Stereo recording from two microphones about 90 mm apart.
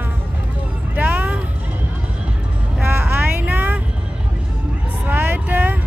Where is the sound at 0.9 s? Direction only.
20° right (ahead or behind).